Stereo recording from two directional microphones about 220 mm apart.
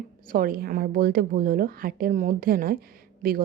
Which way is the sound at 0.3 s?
40° right (ahead or behind).